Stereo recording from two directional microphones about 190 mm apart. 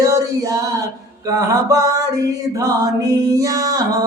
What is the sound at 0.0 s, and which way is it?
Chant, 15° right (ahead or behind).